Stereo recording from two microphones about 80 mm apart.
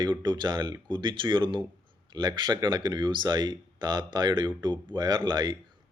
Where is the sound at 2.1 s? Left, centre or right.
Right.